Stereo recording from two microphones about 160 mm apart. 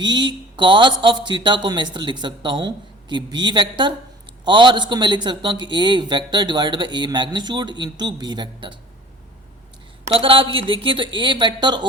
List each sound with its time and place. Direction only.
0.0 s a man's voice: 30° right (ahead or behind)
10.2 s speech: 35° right (ahead or behind)